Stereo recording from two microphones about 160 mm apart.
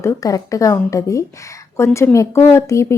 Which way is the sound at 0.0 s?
20° left (ahead or behind).